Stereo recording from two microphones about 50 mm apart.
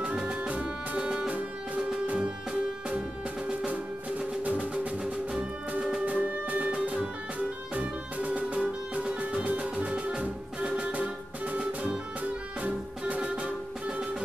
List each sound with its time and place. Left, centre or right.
0.0 s music: centre
3.4 s music: right
5.0 s music: centre
6.0 s music: right
13.2 s music: right